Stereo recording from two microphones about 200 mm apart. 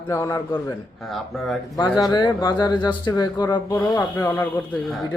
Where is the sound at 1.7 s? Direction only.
20° left (ahead or behind).